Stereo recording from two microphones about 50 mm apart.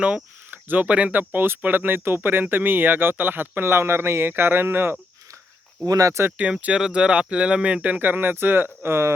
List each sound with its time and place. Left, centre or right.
0.5 s speech: right
1.3 s speech: right
5.8 s speech: right
6.7 s speech: centre; by 9.0 s right